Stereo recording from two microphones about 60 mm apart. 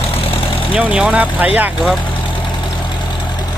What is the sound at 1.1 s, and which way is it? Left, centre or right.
Speech, right.